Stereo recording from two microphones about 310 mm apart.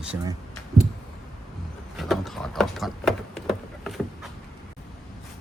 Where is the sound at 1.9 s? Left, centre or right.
Centre.